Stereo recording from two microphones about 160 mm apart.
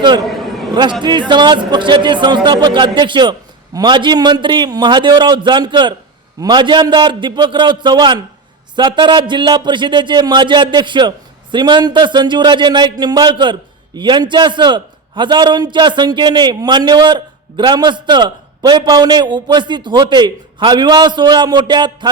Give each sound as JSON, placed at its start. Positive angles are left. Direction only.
{"t": 0.0, "sound": "a man's voice", "side_deg": -30}
{"t": 0.3, "sound": "a sound", "side_deg": 0}
{"t": 0.7, "sound": "a man's voice", "side_deg": -25}